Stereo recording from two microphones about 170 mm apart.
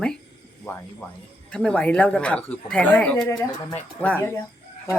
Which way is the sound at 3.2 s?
20° left (ahead or behind).